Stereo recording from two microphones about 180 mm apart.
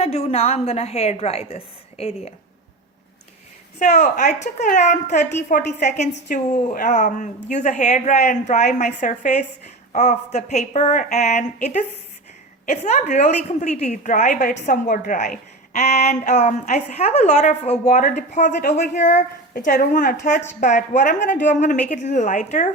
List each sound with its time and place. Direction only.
0.0 s a woman's voice: 35° left (ahead or behind)
3.8 s a woman's voice: 40° left (ahead or behind)